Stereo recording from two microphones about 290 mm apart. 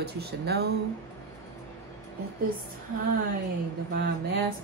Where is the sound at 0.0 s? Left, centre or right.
Right.